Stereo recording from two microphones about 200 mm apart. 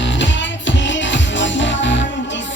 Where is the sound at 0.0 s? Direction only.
65° left (ahead or behind).